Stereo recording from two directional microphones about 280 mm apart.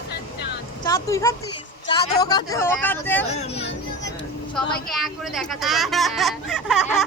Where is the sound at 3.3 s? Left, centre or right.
Left.